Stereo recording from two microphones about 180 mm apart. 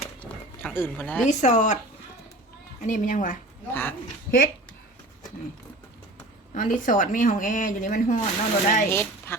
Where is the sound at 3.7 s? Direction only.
10° left (ahead or behind).